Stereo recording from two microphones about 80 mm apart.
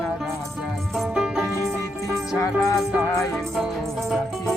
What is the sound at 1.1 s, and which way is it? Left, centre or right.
Music, centre.